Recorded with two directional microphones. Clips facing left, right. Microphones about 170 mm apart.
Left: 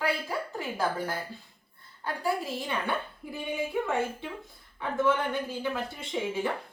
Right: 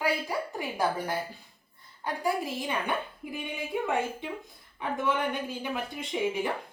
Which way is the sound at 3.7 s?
15° right (ahead or behind).